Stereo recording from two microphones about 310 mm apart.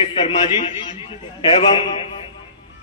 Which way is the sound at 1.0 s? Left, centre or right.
Centre.